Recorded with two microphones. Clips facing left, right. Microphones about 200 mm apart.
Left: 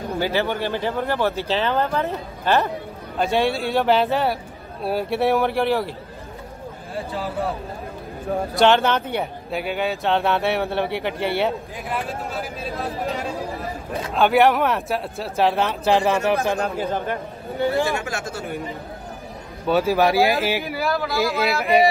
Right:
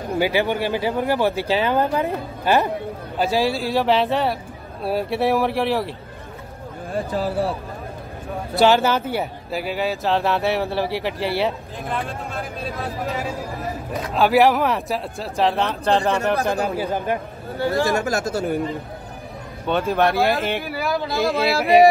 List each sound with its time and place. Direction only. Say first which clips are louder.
0.2 s speech: right 2 dB; 15° right (ahead or behind)
3.2 s speech: even; centre (ahead or behind)
7.1 s speech: right 3 dB; 40° right (ahead or behind)
8.5 s speech: right 1 dB; 5° right (ahead or behind)
16.4 s speech: right 1 dB; 5° right (ahead or behind)
17.6 s speech: even; 15° left (ahead or behind)
17.8 s speech: right 5 dB; 40° right (ahead or behind)
19.6 s speech: left 1 dB; 5° left (ahead or behind)